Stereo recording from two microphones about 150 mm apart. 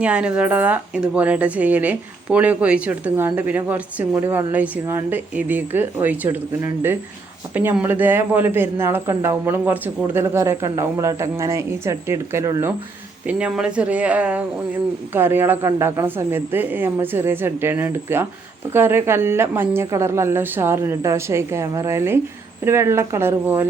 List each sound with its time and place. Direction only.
0.0 s speech: 5° right (ahead or behind)
13.2 s speech: 5° right (ahead or behind)